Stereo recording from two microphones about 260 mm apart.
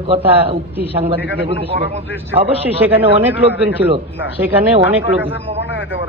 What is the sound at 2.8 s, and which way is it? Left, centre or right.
A man's voice, centre.